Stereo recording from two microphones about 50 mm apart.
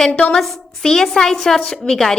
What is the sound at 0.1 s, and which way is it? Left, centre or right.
Speech, left.